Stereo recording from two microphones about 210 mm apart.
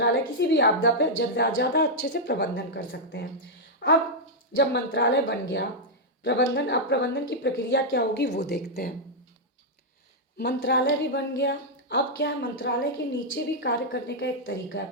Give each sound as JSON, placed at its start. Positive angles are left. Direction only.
{"t": 0.0, "sound": "a woman's voice", "side_deg": 55}
{"t": 10.3, "sound": "a woman's voice", "side_deg": 50}